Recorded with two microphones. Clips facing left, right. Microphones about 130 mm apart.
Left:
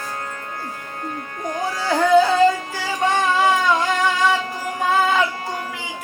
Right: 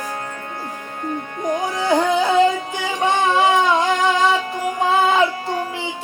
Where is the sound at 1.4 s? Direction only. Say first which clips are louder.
Right 4 dB; 20° right (ahead or behind).